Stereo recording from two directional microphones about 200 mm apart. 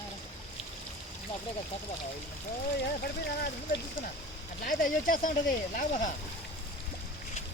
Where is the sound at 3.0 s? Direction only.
50° left (ahead or behind).